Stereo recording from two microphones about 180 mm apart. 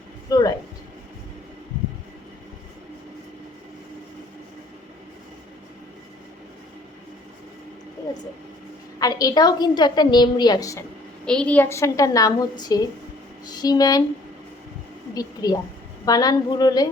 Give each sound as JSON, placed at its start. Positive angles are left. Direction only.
{"t": 0.3, "sound": "a sound", "side_deg": 20}
{"t": 9.0, "sound": "a woman's voice", "side_deg": 20}
{"t": 11.3, "sound": "a woman's voice", "side_deg": 5}
{"t": 15.1, "sound": "a woman's voice", "side_deg": 20}